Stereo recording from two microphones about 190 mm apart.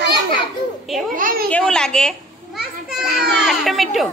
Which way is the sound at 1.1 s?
50° right (ahead or behind).